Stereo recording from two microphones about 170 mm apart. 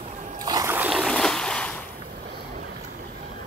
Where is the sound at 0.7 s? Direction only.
5° right (ahead or behind).